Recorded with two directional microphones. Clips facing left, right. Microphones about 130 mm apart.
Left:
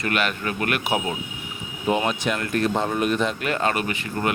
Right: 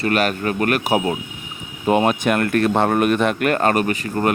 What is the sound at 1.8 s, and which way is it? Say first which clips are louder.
Speech: right 6 dB; 55° right (ahead or behind).